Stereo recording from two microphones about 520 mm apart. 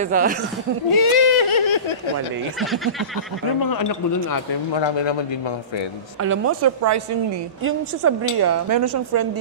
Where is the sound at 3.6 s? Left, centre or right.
Left.